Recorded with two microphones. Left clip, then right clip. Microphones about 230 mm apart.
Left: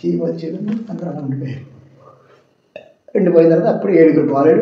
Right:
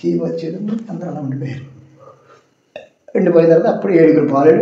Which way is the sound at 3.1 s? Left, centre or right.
Right.